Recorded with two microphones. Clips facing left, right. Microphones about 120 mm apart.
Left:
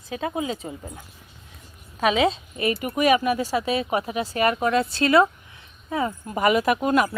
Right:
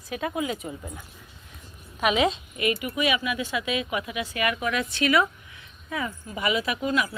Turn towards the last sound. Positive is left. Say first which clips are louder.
# left 6 dB
turn(degrees=50)  # may be behind; listen again after turning